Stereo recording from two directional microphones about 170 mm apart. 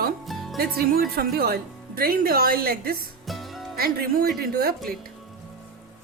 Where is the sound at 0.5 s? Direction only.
60° right (ahead or behind).